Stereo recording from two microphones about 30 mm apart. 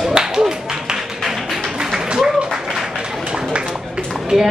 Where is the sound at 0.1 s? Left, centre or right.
Centre.